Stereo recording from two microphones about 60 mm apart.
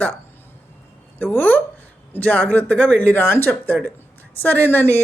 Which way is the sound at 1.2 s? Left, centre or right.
Left.